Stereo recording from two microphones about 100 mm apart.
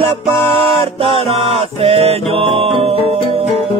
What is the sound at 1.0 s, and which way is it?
Music, 90° right.